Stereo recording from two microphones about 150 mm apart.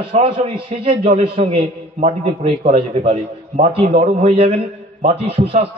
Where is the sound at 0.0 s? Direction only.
35° right (ahead or behind).